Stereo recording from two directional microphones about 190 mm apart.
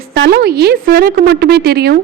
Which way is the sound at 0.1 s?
60° right (ahead or behind).